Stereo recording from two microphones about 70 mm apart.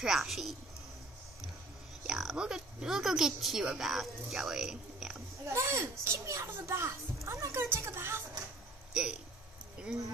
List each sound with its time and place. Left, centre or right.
0.0 s a woman's voice: centre
2.0 s speech: centre
5.5 s a child's voice: right
8.9 s speech: centre